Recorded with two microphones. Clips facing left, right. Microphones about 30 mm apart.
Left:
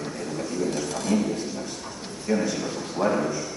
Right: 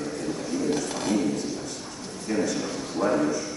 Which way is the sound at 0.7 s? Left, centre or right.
Centre.